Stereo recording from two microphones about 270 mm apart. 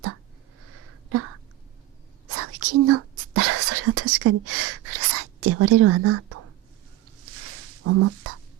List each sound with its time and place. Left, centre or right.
2.3 s whispering: right
7.9 s speech: right